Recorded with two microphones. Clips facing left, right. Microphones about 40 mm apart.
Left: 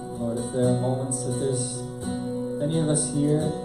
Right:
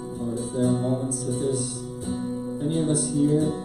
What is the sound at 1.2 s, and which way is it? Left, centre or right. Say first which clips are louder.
Speech: even; centre.